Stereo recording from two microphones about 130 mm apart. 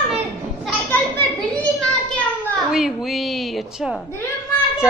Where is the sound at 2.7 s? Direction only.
Centre (ahead or behind).